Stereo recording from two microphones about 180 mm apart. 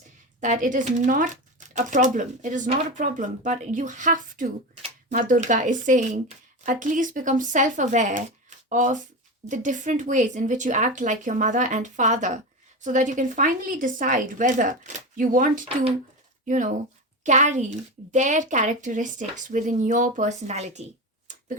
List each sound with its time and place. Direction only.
0.3 s speech: 45° right (ahead or behind)